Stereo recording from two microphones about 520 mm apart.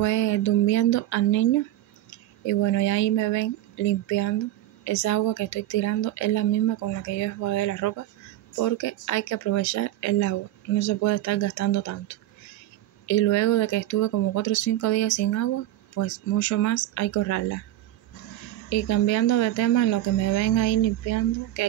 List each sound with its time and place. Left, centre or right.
0.0 s speech: left
18.7 s speech: left